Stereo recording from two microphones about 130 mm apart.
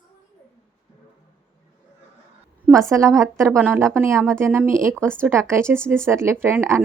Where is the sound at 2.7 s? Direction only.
25° right (ahead or behind).